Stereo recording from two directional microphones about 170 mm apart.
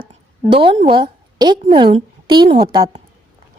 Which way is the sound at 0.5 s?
30° right (ahead or behind).